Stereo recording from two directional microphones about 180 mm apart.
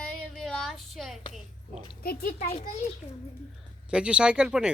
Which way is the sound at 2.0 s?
55° left (ahead or behind).